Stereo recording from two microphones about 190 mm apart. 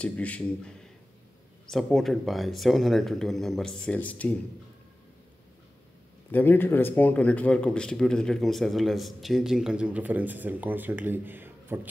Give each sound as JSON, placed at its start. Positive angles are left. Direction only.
{"t": 0.0, "sound": "a man's voice", "side_deg": 5}
{"t": 6.3, "sound": "speech", "side_deg": 10}